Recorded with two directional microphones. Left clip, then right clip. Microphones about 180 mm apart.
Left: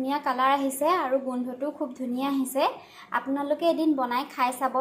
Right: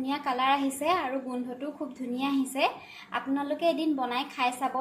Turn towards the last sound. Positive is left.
turn(degrees=10)  # may be behind; listen again after turning